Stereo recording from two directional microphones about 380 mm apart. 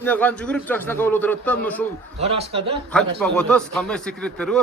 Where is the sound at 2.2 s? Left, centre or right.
Centre.